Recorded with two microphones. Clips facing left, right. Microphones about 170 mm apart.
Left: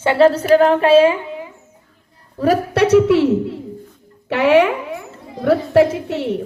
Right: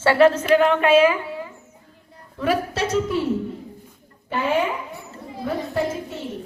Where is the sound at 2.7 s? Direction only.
65° left (ahead or behind).